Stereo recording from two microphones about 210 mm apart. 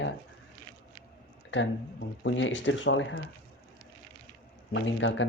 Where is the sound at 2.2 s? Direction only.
60° left (ahead or behind).